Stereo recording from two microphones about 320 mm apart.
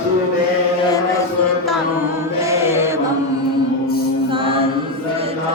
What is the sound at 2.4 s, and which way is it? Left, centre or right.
Mantra, centre.